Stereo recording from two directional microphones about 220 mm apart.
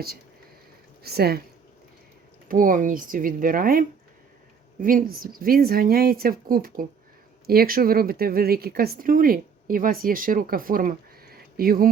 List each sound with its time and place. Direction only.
1.0 s speech: 45° right (ahead or behind)
2.5 s speech: 40° right (ahead or behind)